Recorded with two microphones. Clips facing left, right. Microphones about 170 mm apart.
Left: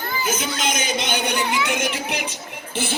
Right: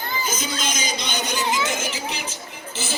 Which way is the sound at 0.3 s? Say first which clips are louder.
Left 3 dB; 65° left (ahead or behind).